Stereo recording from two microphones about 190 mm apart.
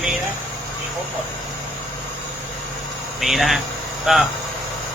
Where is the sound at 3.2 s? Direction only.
Centre (ahead or behind).